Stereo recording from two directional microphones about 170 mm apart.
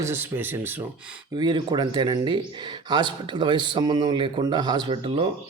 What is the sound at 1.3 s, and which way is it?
Speech, 25° right (ahead or behind).